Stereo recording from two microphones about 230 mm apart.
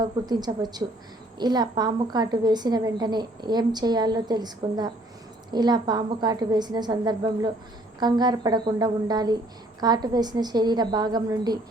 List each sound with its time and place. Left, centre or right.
0.0 s a woman's voice: centre